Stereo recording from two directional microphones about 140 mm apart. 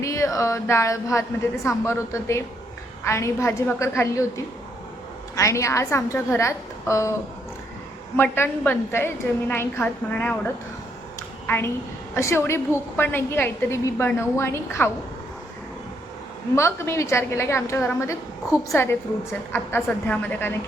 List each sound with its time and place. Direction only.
0.0 s a woman's voice: 20° left (ahead or behind)
5.4 s a woman's voice: 20° left (ahead or behind)
11.2 s a sound: 15° left (ahead or behind)
12.1 s a woman's voice: 20° left (ahead or behind)
16.6 s a woman's voice: 20° left (ahead or behind)